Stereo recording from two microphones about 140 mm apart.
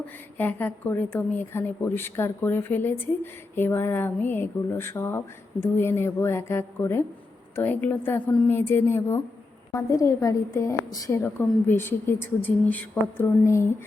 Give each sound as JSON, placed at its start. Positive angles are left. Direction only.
{"t": 0.3, "sound": "a woman's voice", "side_deg": 15}